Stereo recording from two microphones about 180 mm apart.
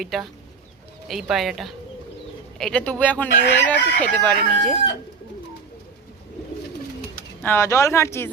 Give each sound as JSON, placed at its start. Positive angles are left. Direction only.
{"t": 0.0, "sound": "speech", "side_deg": 0}
{"t": 7.4, "sound": "speech", "side_deg": 15}